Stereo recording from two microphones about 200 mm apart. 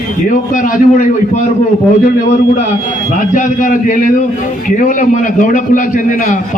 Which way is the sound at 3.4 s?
40° left (ahead or behind).